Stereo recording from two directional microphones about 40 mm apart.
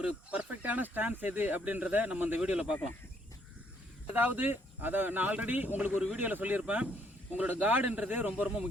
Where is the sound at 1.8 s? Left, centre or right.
Right.